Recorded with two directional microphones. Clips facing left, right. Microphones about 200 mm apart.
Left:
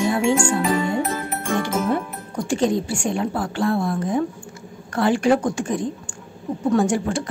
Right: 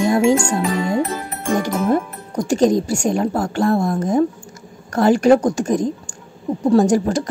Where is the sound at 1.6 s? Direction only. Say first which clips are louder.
Right 4 dB; 40° right (ahead or behind).